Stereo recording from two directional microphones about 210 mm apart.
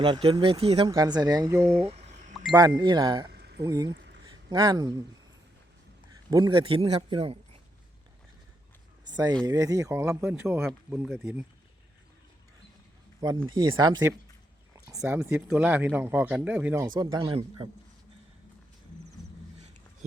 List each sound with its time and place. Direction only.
0.0 s speech: 25° right (ahead or behind)
1.8 s a sound: 30° right (ahead or behind)
2.5 s speech: 20° right (ahead or behind)
3.3 s a sound: 50° right (ahead or behind)
3.6 s speech: 15° right (ahead or behind)
4.3 s a sound: 25° right (ahead or behind)
6.3 s speech: 20° right (ahead or behind)
9.0 s speech: 20° right (ahead or behind)
13.5 s speech: 20° right (ahead or behind)
16.9 s speech: 20° right (ahead or behind)